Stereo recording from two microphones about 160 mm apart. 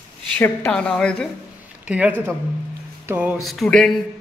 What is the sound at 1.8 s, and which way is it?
Speech, 10° right (ahead or behind).